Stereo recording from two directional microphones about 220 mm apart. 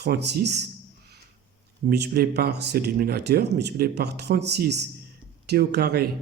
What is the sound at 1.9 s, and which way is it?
Speech, 45° right (ahead or behind).